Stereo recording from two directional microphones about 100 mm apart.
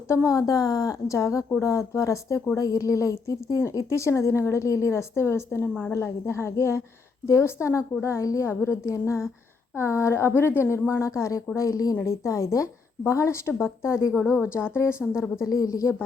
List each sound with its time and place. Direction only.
0.1 s a woman's voice: 30° left (ahead or behind)
14.1 s a woman's voice: 5° right (ahead or behind)
15.1 s speech: 30° left (ahead or behind)